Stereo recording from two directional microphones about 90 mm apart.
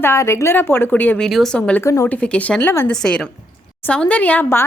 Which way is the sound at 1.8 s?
35° left (ahead or behind).